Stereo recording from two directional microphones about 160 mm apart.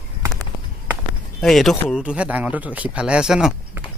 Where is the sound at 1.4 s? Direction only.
Centre (ahead or behind).